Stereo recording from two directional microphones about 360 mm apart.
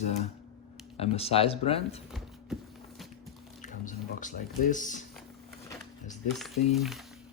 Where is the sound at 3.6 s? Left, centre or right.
Left.